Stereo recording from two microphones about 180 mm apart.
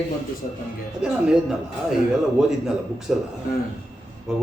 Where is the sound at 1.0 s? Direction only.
5° right (ahead or behind).